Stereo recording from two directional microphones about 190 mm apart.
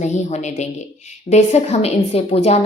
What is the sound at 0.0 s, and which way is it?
A woman's voice, 35° left (ahead or behind).